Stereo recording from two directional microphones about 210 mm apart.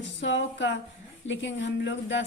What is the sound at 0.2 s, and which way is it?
A woman's voice, 60° left (ahead or behind).